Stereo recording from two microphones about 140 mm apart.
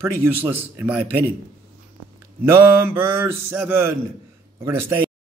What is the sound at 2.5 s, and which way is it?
Speech, 15° right (ahead or behind).